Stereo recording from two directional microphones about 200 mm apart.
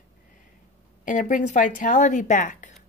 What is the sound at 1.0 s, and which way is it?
Speech, 40° left (ahead or behind).